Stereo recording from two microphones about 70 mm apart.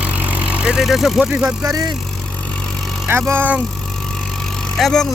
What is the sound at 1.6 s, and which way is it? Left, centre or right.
Speech, right.